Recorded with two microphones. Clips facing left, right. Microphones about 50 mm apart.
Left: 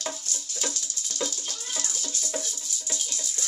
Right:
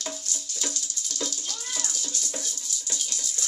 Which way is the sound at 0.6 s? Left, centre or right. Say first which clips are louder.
Left 2 dB; left.